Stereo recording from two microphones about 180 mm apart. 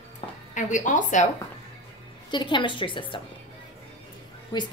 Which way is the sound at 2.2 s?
25° left (ahead or behind).